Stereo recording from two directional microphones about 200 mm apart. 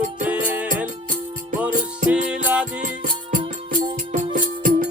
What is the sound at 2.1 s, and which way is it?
Music, 5° right (ahead or behind).